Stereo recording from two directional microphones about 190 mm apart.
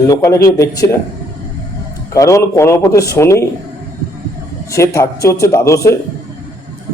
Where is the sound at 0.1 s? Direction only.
15° left (ahead or behind).